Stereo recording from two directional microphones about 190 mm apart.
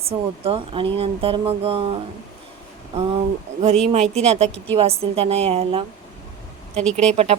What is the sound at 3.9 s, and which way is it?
A woman's voice, 35° right (ahead or behind).